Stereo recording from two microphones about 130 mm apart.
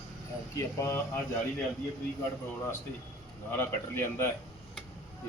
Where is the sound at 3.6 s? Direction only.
20° left (ahead or behind).